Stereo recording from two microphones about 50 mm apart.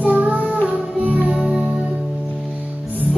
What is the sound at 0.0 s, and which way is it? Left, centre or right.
Music, right.